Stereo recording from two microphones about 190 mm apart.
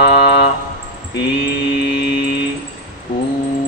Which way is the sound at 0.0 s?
60° left (ahead or behind).